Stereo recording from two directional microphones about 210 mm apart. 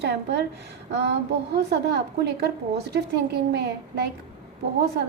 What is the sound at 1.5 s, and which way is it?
Speech, 50° right (ahead or behind).